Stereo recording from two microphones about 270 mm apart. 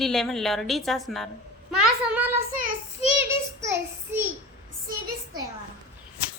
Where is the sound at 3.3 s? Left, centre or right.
Centre.